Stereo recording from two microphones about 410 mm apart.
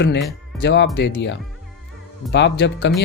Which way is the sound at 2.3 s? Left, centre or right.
Left.